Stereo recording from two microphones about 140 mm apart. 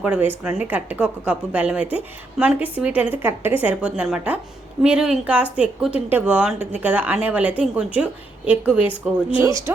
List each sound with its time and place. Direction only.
0.0 s a woman's voice: 10° right (ahead or behind)
9.3 s speech: 20° right (ahead or behind)